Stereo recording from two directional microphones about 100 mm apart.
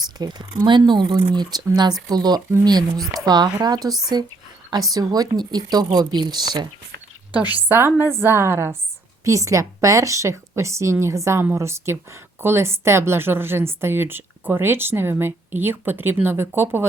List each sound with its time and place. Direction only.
0.2 s a woman's voice: 45° right (ahead or behind)
7.3 s a woman's voice: 20° right (ahead or behind)